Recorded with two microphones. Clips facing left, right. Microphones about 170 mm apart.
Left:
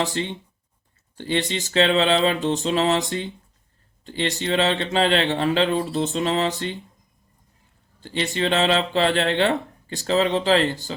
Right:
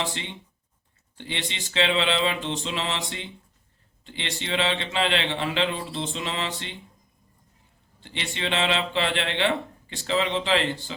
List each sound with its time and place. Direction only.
0.0 s a man's voice: 40° left (ahead or behind)
8.0 s speech: 40° left (ahead or behind)